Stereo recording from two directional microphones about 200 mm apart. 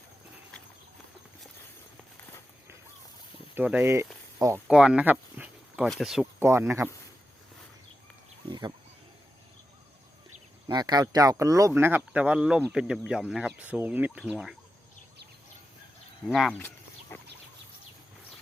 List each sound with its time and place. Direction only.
3.5 s speech: 10° right (ahead or behind)
4.7 s speech: 5° right (ahead or behind)
6.4 s speech: 15° right (ahead or behind)
8.4 s a sound: 20° right (ahead or behind)
10.7 s speech: 20° right (ahead or behind); by 14.5 s 5° right (ahead or behind)
16.2 s speech: centre (ahead or behind)
16.6 s a sound: 10° left (ahead or behind)